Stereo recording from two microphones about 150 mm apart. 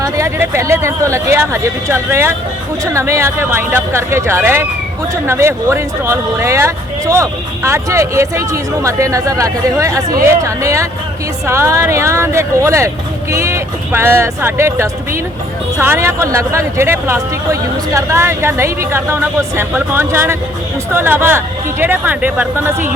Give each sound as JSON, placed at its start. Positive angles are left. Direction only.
{"t": 0.0, "sound": "speech", "side_deg": -20}